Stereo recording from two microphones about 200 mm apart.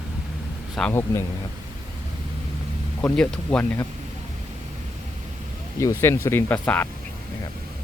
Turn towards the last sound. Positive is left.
turn(degrees=10)  # may be behind; listen again after turning